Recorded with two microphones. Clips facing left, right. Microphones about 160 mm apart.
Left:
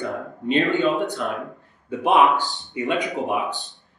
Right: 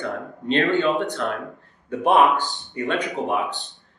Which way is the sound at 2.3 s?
20° right (ahead or behind).